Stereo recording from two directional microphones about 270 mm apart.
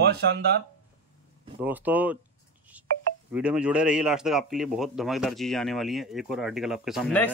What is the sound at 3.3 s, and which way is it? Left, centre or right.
A man's voice, centre.